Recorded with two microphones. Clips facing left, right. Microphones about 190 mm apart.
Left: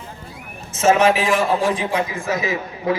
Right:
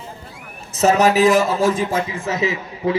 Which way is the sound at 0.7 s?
35° right (ahead or behind).